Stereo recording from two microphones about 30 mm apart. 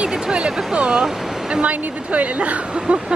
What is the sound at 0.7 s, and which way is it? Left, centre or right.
Speech, right.